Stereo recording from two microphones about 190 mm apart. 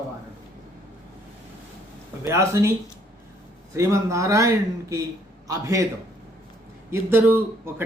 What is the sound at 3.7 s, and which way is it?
Mantra, 15° right (ahead or behind).